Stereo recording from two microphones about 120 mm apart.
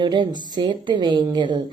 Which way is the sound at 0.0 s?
35° right (ahead or behind).